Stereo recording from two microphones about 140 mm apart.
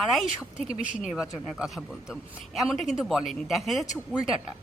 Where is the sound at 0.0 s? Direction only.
Centre (ahead or behind).